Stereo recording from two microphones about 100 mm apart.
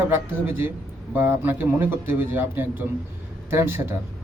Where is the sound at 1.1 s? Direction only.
20° right (ahead or behind).